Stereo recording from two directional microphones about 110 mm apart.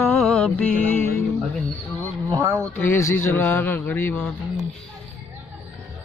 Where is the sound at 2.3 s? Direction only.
25° right (ahead or behind).